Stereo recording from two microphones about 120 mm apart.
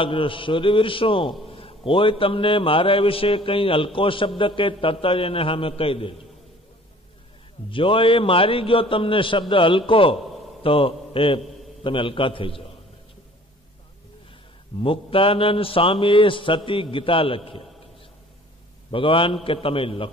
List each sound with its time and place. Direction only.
0.0 s a man's voice: 45° left (ahead or behind)
7.7 s a man's voice: 45° left (ahead or behind)
14.8 s a man's voice: 50° left (ahead or behind)
18.9 s a man's voice: 45° left (ahead or behind)